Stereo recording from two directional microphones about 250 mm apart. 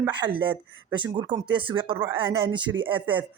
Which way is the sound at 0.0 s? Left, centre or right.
Centre.